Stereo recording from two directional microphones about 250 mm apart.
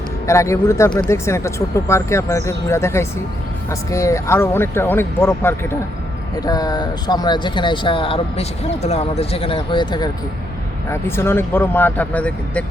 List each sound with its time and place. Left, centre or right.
0.3 s speech: centre
11.1 s speech: centre